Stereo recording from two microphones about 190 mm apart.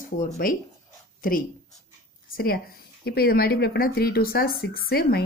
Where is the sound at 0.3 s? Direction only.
45° left (ahead or behind).